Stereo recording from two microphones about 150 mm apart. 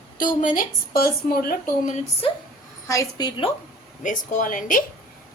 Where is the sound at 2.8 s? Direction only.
20° left (ahead or behind).